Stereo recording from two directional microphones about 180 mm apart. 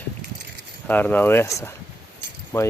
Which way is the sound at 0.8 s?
10° left (ahead or behind).